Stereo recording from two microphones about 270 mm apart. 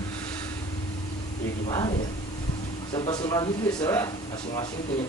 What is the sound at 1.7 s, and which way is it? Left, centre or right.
Speech, centre.